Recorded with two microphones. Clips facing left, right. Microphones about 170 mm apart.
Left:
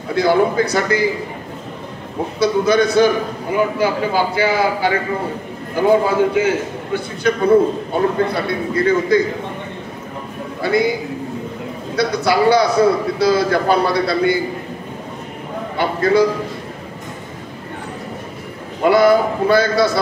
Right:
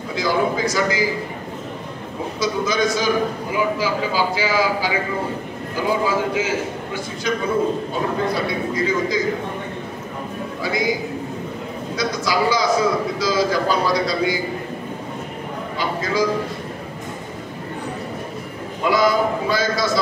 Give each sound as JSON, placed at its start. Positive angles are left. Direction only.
{"t": 0.1, "sound": "a man's voice", "side_deg": 60}
{"t": 2.4, "sound": "a man's voice", "side_deg": 60}
{"t": 10.6, "sound": "a man's voice", "side_deg": 60}
{"t": 15.8, "sound": "a man's voice", "side_deg": 60}
{"t": 18.9, "sound": "a man's voice", "side_deg": 60}